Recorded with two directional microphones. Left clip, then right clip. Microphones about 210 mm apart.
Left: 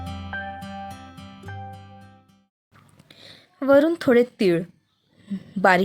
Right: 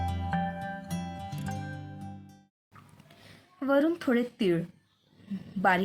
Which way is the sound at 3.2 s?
40° left (ahead or behind).